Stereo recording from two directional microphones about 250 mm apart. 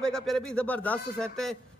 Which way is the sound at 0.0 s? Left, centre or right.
Centre.